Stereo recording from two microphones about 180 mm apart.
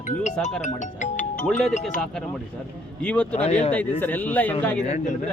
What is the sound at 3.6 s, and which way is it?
A man's voice, 10° left (ahead or behind).